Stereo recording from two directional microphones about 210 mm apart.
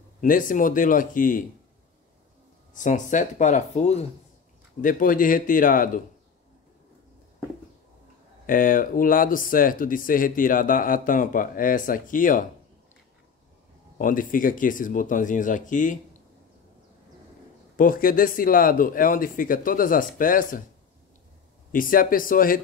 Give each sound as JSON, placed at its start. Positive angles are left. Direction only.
{"t": 0.2, "sound": "speech", "side_deg": 40}
{"t": 2.7, "sound": "speech", "side_deg": 35}
{"t": 8.5, "sound": "speech", "side_deg": 40}
{"t": 13.9, "sound": "speech", "side_deg": 40}
{"t": 17.7, "sound": "speech", "side_deg": 40}
{"t": 21.7, "sound": "speech", "side_deg": 40}